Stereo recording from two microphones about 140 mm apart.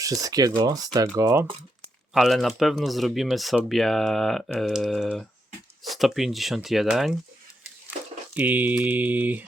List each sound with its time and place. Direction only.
0.0 s speech: 25° right (ahead or behind)
2.1 s speech: centre (ahead or behind)
8.4 s mantra: 10° right (ahead or behind)